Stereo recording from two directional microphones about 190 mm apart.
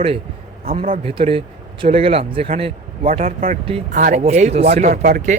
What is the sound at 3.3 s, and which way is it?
Speech, 45° right (ahead or behind).